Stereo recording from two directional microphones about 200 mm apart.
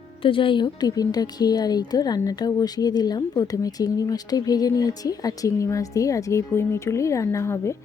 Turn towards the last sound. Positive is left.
turn(degrees=15)  # may be behind; listen again after turning